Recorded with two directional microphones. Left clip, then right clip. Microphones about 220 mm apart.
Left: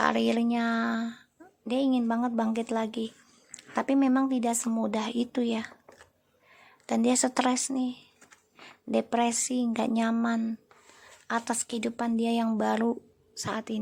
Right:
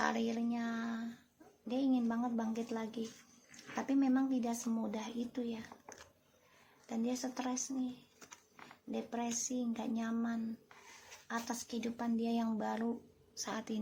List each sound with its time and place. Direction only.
0.0 s a woman's voice: 40° left (ahead or behind)
6.8 s a woman's voice: 50° left (ahead or behind)
8.9 s a woman's voice: 50° left (ahead or behind); by 13.7 s 35° left (ahead or behind)